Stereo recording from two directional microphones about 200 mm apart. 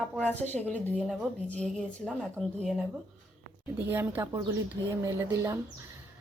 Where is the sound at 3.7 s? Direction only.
10° right (ahead or behind).